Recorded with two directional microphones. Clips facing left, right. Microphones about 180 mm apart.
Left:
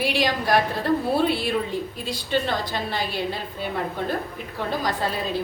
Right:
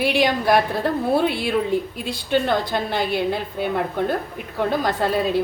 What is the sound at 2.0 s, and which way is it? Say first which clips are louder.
A woman's voice: right 4 dB; 60° right (ahead or behind).